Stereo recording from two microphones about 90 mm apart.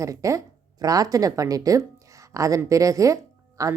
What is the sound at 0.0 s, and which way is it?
Speech, 35° right (ahead or behind).